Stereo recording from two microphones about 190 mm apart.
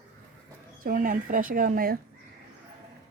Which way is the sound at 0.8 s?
45° right (ahead or behind).